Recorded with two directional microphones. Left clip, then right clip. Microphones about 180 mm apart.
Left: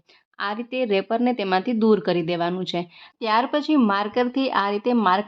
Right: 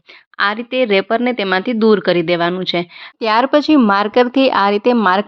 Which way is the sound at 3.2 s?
55° right (ahead or behind).